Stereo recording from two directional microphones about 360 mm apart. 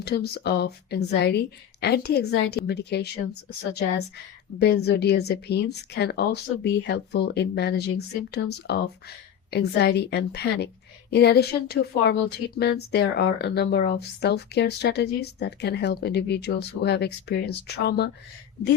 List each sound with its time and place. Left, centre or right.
0.0 s a woman's voice: left
4.6 s a woman's voice: left